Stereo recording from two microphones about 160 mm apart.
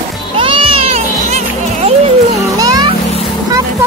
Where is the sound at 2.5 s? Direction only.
25° right (ahead or behind).